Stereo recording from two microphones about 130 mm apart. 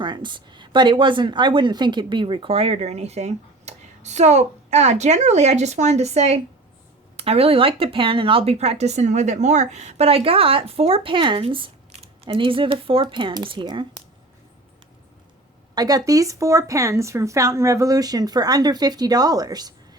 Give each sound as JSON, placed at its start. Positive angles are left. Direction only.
{"t": 0.0, "sound": "speech", "side_deg": -35}
{"t": 15.7, "sound": "speech", "side_deg": -30}